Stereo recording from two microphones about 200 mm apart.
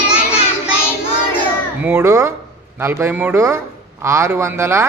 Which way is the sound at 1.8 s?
10° right (ahead or behind).